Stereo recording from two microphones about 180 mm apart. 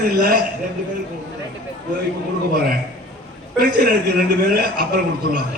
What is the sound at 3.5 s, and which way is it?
A man's voice, 60° right (ahead or behind).